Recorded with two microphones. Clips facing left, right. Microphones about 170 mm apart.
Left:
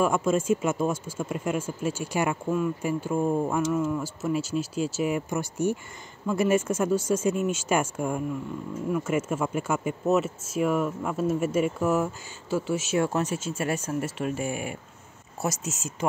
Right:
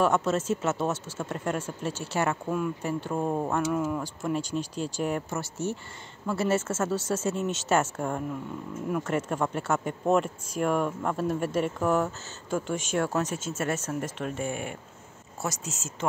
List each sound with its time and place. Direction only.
0.0 s speech: 10° left (ahead or behind)
2.5 s speech: centre (ahead or behind)
3.6 s speech: 5° right (ahead or behind)